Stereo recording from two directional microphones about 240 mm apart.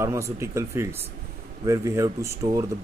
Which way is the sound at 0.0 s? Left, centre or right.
Centre.